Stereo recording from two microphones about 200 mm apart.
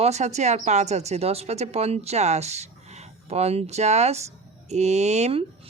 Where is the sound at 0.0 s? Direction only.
35° right (ahead or behind).